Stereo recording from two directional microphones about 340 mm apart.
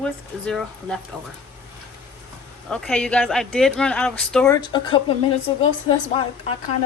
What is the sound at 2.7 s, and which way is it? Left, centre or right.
Speech, centre.